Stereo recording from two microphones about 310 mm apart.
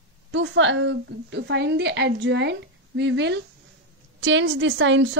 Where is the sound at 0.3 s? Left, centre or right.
Right.